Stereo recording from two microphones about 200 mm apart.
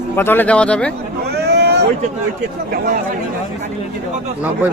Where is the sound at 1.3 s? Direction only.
55° right (ahead or behind).